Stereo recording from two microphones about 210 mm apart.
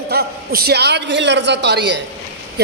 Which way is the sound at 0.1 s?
50° right (ahead or behind).